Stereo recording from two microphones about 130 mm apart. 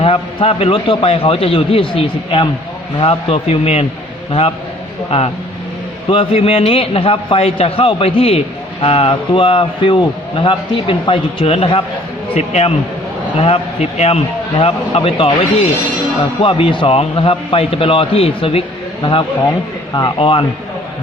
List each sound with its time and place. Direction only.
0.0 s a man's voice: 45° left (ahead or behind)
6.1 s a man's voice: 45° left (ahead or behind)
19.9 s speech: 35° left (ahead or behind)
20.1 s a man's voice: 45° left (ahead or behind)